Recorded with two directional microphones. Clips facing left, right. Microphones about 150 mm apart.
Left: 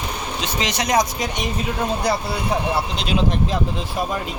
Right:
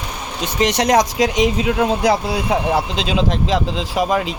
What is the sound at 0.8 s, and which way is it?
Speech, 90° right.